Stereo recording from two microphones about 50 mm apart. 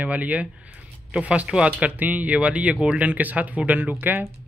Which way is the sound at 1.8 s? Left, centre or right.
Right.